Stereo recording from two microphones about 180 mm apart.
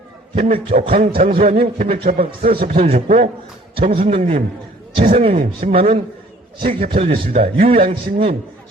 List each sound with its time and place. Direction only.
0.3 s a man's voice: 35° right (ahead or behind)
5.4 s speech: 50° right (ahead or behind)
5.7 s a man's voice: 30° right (ahead or behind)